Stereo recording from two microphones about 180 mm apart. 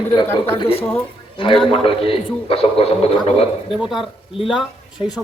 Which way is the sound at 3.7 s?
Centre (ahead or behind).